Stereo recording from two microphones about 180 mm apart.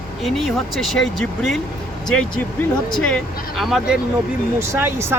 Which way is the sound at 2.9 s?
5° left (ahead or behind).